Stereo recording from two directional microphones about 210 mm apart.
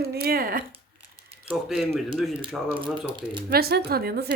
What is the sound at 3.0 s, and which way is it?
Speech, 20° right (ahead or behind).